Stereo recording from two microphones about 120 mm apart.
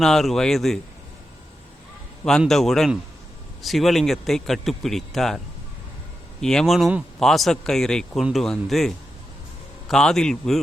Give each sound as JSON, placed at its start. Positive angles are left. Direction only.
{"t": 0.0, "sound": "speech", "side_deg": 5}
{"t": 2.5, "sound": "speech", "side_deg": 5}
{"t": 6.4, "sound": "speech", "side_deg": 5}
{"t": 9.9, "sound": "speech", "side_deg": 5}